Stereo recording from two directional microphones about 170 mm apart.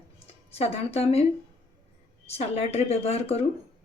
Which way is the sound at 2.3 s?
35° left (ahead or behind).